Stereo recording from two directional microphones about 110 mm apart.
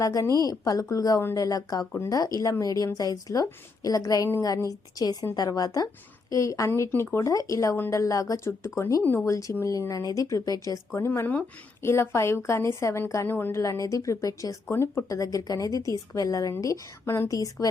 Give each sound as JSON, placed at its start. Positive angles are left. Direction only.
{"t": 0.0, "sound": "speech", "side_deg": 30}